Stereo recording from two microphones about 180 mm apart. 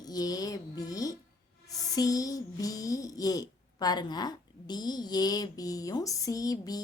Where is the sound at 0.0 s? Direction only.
20° left (ahead or behind).